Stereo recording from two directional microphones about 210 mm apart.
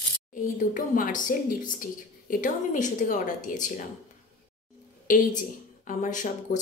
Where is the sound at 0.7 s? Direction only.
40° left (ahead or behind).